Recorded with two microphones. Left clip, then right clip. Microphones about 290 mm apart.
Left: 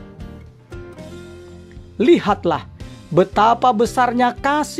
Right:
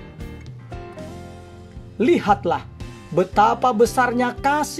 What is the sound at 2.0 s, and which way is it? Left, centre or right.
Speech, left.